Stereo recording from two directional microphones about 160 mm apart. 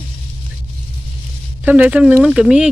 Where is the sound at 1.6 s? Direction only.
10° right (ahead or behind).